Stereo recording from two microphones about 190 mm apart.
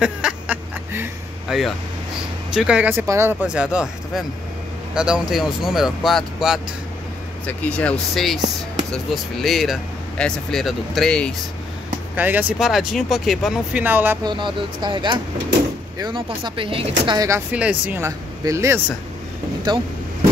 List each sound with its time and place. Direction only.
0.0 s a sound: 5° right (ahead or behind)
1.5 s speech: 5° right (ahead or behind)
12.2 s speech: 10° right (ahead or behind)
14.2 s speech: 25° right (ahead or behind)